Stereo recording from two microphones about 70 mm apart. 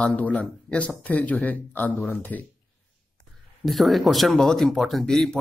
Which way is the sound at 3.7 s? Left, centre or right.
Centre.